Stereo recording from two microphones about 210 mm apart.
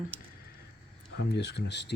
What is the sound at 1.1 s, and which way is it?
Speech, 55° left (ahead or behind).